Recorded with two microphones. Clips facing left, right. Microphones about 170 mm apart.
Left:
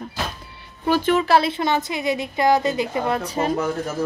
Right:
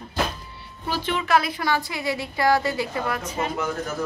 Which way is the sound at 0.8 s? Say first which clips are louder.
Left 8 dB; 50° left (ahead or behind).